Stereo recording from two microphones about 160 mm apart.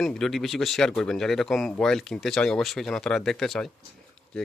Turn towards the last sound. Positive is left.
turn(degrees=5)  # may be behind; listen again after turning